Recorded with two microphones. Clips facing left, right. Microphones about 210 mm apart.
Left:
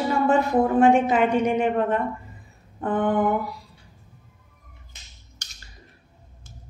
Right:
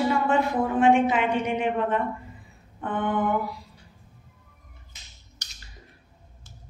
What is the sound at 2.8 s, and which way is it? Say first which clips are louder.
Mantra: left 5 dB; 40° left (ahead or behind).